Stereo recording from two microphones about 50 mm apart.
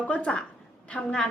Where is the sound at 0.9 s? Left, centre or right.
Centre.